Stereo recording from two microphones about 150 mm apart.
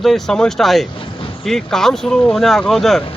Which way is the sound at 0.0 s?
Centre (ahead or behind).